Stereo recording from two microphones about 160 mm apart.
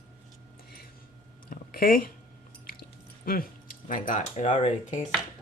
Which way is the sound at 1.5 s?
65° left (ahead or behind).